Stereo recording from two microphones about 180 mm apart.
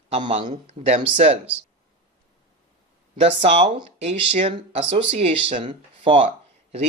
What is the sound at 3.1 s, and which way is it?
Speech, 35° right (ahead or behind).